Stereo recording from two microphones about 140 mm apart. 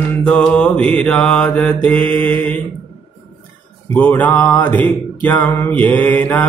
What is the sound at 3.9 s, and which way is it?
Mantra, 10° left (ahead or behind).